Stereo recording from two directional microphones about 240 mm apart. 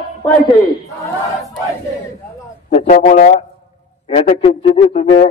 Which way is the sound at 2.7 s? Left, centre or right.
Left.